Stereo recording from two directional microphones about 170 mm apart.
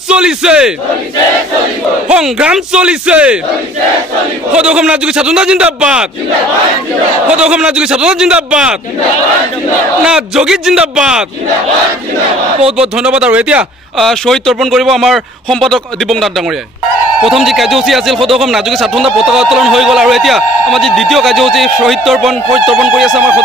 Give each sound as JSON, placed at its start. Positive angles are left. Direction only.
{"t": 0.1, "sound": "speech", "side_deg": -5}
{"t": 2.0, "sound": "speech", "side_deg": -5}
{"t": 4.5, "sound": "speech", "side_deg": -5}
{"t": 7.2, "sound": "speech", "side_deg": -5}
{"t": 10.0, "sound": "speech", "side_deg": -5}
{"t": 12.5, "sound": "a man's voice", "side_deg": -35}
{"t": 12.9, "sound": "speech", "side_deg": -5}